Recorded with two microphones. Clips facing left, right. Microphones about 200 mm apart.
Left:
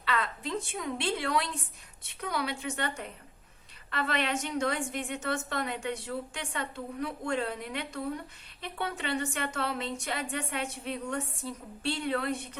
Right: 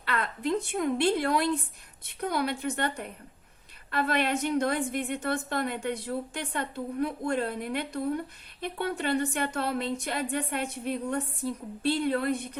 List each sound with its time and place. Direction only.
0.0 s a woman's voice: 60° right (ahead or behind)